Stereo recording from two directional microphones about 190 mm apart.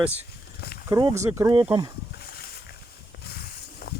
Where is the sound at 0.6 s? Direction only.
50° left (ahead or behind).